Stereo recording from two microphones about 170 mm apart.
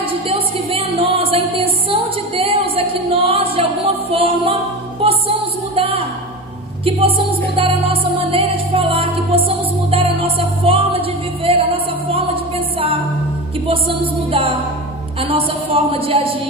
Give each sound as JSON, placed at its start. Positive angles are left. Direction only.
{"t": 0.1, "sound": "music", "side_deg": -35}
{"t": 14.3, "sound": "music", "side_deg": -30}
{"t": 15.1, "sound": "a sound", "side_deg": -30}